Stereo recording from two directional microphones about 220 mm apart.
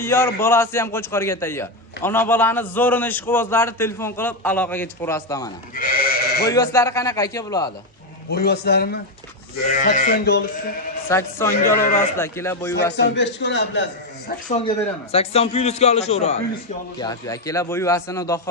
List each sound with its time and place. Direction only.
0.0 s a man's voice: 10° left (ahead or behind)
5.7 s sheep: 40° left (ahead or behind)
6.5 s a man's voice: 15° left (ahead or behind)
8.3 s a man's voice: 50° left (ahead or behind)
9.8 s speech: 35° left (ahead or behind)
11.1 s a man's voice: 10° left (ahead or behind)
11.6 s speech: 40° left (ahead or behind)
12.1 s a man's voice: 10° left (ahead or behind)
13.0 s a man's voice: 50° left (ahead or behind)
14.3 s a man's voice: 35° left (ahead or behind)
17.0 s a man's voice: 15° left (ahead or behind)